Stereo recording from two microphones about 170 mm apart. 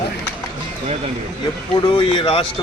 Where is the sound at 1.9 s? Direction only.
30° left (ahead or behind).